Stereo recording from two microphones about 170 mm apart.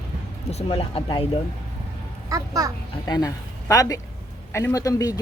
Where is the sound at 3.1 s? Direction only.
20° left (ahead or behind).